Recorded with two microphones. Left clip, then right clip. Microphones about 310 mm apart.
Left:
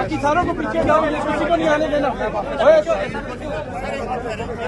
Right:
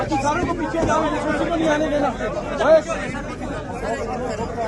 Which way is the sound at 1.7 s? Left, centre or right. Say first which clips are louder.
Left 2 dB; left.